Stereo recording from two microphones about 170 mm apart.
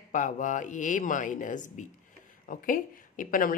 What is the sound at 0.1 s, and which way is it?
Speech, 50° left (ahead or behind).